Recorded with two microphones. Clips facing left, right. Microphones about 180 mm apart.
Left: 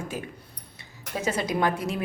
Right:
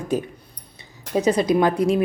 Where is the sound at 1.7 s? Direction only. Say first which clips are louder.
Right 8 dB; 35° right (ahead or behind).